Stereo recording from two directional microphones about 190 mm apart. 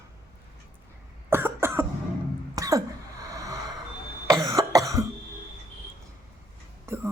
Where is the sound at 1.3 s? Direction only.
10° right (ahead or behind).